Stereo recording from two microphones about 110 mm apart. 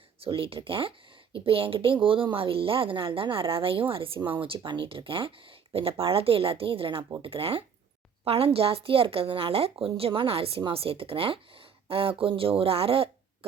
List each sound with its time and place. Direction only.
0.2 s speech: 55° right (ahead or behind)